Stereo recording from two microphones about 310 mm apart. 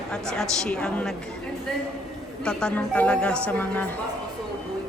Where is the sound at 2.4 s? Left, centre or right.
Centre.